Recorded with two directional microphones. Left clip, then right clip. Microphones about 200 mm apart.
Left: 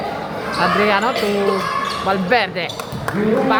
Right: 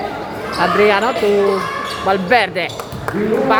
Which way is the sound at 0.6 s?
20° right (ahead or behind).